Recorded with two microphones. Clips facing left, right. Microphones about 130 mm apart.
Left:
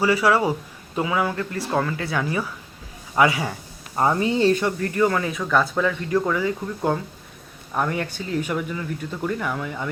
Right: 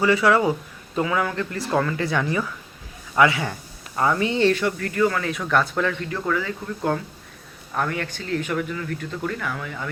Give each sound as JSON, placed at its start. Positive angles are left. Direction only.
{"t": 0.0, "sound": "speech", "side_deg": 10}
{"t": 3.9, "sound": "speech", "side_deg": 30}
{"t": 4.6, "sound": "speech", "side_deg": 20}
{"t": 5.3, "sound": "speech", "side_deg": 0}
{"t": 6.0, "sound": "speech", "side_deg": 20}